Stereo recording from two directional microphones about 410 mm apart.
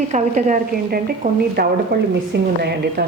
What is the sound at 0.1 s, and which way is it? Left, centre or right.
Speech, centre.